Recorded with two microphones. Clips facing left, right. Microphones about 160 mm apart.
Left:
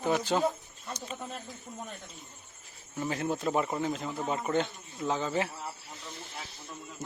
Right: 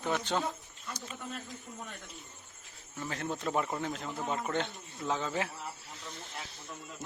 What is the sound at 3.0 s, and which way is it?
Speech, 15° left (ahead or behind).